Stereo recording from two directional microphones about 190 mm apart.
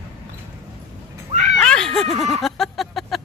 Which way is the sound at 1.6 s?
5° left (ahead or behind).